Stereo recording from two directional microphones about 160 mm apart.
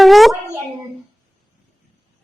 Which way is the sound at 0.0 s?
Centre (ahead or behind).